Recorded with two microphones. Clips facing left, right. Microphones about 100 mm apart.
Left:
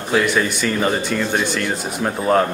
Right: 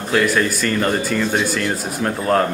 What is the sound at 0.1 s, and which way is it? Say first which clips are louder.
Speech: even; 5° left (ahead or behind).